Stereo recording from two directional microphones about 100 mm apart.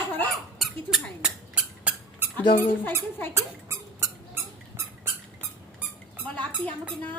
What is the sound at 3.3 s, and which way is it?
Squeak, 25° right (ahead or behind).